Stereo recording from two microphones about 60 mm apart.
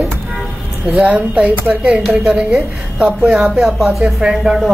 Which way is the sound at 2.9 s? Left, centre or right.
Right.